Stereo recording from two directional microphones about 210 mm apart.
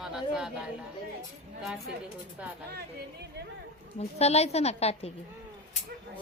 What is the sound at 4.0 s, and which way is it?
A woman's voice, 30° left (ahead or behind).